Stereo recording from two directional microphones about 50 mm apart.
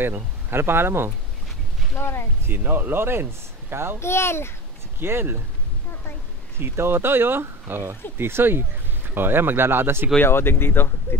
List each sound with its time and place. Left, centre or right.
0.0 s speech: right
2.0 s a child's voice: left
2.4 s speech: right
4.0 s a child's voice: left
5.0 s speech: right
6.6 s speech: right
10.2 s speech: left